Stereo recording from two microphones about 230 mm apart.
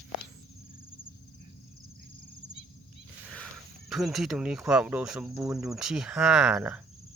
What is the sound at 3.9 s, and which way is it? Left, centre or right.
Speech, centre.